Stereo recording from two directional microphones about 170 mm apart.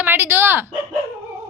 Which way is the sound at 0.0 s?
10° right (ahead or behind).